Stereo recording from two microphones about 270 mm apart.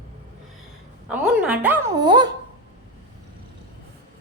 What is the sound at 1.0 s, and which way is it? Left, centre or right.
Dog, centre.